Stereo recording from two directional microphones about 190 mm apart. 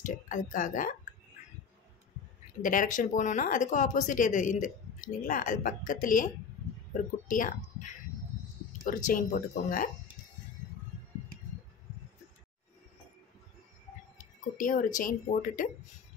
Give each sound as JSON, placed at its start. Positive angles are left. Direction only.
{"t": 0.0, "sound": "speech", "side_deg": 45}
{"t": 2.6, "sound": "a woman's voice", "side_deg": 45}
{"t": 14.1, "sound": "speech", "side_deg": 45}